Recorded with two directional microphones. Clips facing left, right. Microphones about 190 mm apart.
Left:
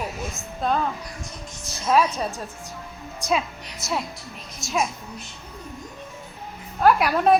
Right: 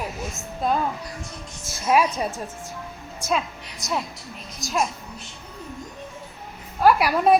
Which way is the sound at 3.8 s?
15° right (ahead or behind).